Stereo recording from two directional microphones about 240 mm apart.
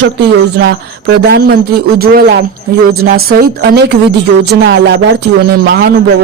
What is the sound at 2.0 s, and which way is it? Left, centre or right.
A man's voice, right.